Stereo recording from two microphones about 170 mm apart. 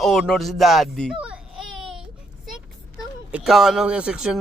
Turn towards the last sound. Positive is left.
turn(degrees=-5)  # may be behind; listen again after turning